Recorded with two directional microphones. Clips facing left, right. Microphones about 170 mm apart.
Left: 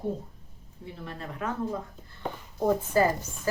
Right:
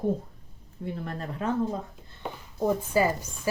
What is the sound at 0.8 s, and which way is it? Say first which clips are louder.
Speech: right 6 dB; 50° right (ahead or behind).